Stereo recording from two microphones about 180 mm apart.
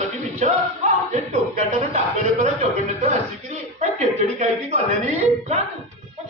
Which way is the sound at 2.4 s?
40° right (ahead or behind).